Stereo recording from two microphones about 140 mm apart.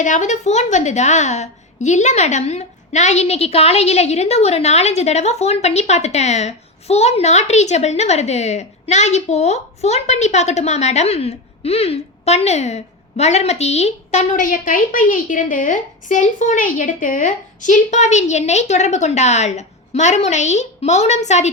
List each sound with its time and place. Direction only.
0.0 s a woman's voice: 60° left (ahead or behind)